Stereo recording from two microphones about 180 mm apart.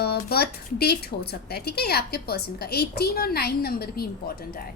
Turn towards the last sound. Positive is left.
turn(degrees=60)  # may be behind; listen again after turning